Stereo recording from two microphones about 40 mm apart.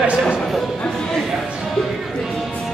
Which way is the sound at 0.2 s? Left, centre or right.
Left.